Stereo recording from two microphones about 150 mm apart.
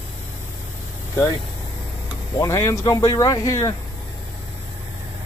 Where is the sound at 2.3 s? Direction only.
20° left (ahead or behind).